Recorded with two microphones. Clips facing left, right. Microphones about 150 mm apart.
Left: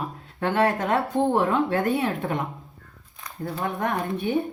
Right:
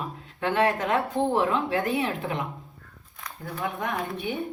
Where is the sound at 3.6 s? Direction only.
45° left (ahead or behind).